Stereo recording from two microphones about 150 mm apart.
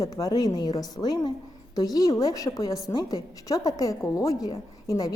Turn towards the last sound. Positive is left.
turn(degrees=25)  # may be behind; listen again after turning